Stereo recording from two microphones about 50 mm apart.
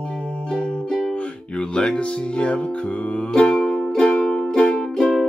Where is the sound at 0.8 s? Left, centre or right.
Centre.